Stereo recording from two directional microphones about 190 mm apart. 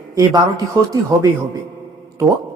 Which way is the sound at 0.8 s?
15° right (ahead or behind).